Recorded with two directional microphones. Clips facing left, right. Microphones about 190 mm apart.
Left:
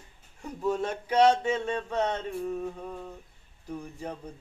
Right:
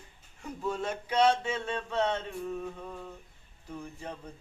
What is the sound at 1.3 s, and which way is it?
Speech, 15° left (ahead or behind).